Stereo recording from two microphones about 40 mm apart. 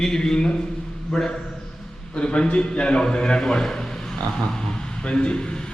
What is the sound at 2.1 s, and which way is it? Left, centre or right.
A man's voice, left.